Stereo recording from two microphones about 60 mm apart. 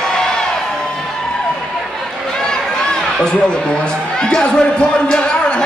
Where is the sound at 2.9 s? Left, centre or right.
Centre.